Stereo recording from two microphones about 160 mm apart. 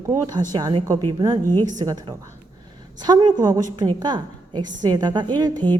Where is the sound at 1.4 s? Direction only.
15° left (ahead or behind).